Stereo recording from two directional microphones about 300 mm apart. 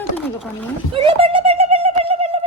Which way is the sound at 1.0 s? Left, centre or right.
Centre.